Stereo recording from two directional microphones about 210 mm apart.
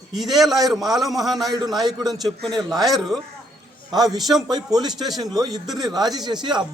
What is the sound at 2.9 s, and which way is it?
Speech, centre (ahead or behind).